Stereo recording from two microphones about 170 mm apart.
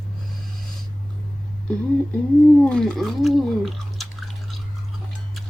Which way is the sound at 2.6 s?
5° left (ahead or behind).